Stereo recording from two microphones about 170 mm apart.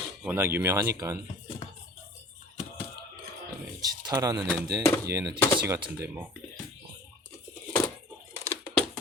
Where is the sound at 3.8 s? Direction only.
20° right (ahead or behind).